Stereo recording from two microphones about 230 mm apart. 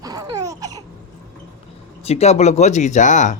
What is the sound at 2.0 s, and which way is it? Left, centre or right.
Speech, left.